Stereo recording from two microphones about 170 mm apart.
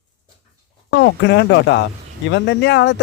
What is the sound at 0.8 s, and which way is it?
Speech, 90° left.